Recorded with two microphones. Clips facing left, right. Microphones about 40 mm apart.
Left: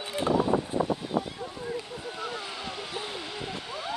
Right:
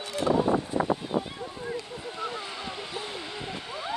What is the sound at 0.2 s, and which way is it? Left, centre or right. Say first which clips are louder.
Speech: right 1 dB; left.